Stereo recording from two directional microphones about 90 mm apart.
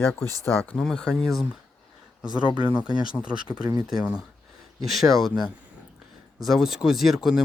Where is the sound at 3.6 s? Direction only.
45° right (ahead or behind).